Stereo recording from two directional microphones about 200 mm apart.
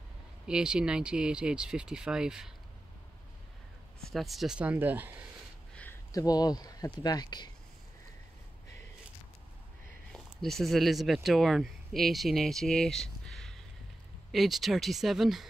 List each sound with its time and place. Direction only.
0.5 s speech: 5° right (ahead or behind)
4.0 s speech: centre (ahead or behind)
5.8 s speech: 15° left (ahead or behind)
10.1 s speech: centre (ahead or behind)